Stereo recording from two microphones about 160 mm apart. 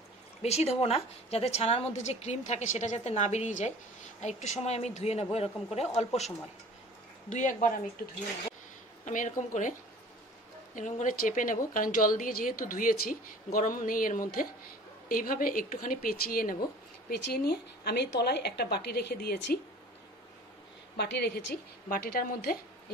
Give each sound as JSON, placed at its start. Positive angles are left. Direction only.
{"t": 0.4, "sound": "a woman's voice", "side_deg": 40}
{"t": 9.0, "sound": "a woman's voice", "side_deg": 55}
{"t": 17.1, "sound": "a woman's voice", "side_deg": 85}
{"t": 20.9, "sound": "a woman's voice", "side_deg": 90}
{"t": 21.8, "sound": "a woman's voice", "side_deg": 65}